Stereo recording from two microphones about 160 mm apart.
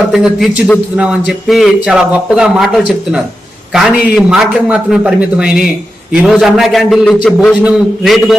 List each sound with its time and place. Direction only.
0.1 s speech: centre (ahead or behind)